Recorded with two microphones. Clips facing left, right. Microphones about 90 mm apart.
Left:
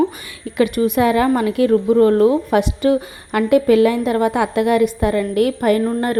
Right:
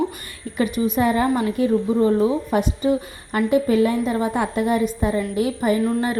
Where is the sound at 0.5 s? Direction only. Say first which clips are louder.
Left 5 dB; 75° left (ahead or behind).